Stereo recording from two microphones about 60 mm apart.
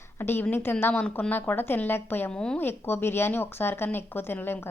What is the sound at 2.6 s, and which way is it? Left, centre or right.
A woman's voice, left.